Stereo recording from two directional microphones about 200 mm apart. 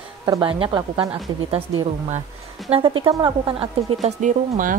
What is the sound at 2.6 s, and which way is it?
Speech, 25° right (ahead or behind).